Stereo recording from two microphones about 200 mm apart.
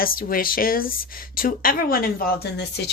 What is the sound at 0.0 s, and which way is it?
A woman's voice, 45° left (ahead or behind).